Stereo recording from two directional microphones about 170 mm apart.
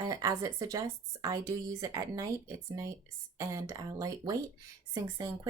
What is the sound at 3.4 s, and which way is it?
A woman's voice, 20° right (ahead or behind).